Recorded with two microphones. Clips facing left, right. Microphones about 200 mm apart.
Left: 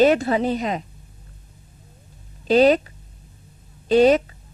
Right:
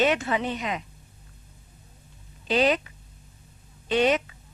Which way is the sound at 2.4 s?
40° left (ahead or behind).